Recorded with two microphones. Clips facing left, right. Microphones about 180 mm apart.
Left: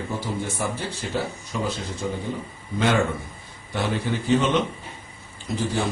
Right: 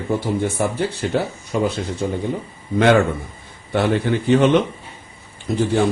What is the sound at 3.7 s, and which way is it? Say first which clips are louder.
Speech: right 7 dB; 60° right (ahead or behind).